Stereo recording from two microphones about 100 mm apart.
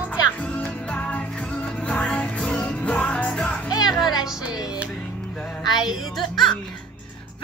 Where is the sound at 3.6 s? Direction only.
40° left (ahead or behind).